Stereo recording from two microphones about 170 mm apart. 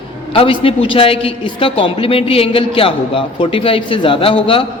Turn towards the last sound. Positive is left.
turn(degrees=30)  # may be behind; listen again after turning